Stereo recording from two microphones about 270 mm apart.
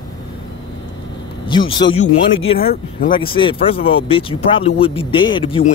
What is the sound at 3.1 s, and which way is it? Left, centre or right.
Speech, centre.